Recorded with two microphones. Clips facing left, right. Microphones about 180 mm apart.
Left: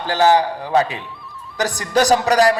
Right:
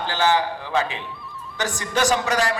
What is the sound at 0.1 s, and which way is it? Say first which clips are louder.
A man's voice: left 7 dB; 40° left (ahead or behind).